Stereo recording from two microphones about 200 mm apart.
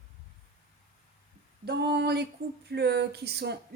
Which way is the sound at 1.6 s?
55° right (ahead or behind).